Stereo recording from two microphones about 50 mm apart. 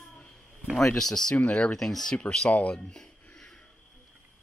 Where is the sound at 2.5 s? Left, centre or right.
Left.